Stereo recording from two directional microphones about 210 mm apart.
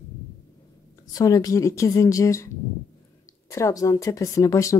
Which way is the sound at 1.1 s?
15° left (ahead or behind).